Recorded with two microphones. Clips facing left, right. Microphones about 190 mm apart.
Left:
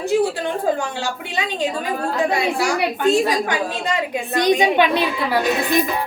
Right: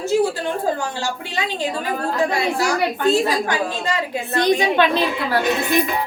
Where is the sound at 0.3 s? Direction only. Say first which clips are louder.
Left 1 dB; 15° left (ahead or behind).